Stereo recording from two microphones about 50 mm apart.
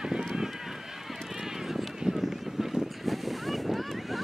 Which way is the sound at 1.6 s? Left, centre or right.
Centre.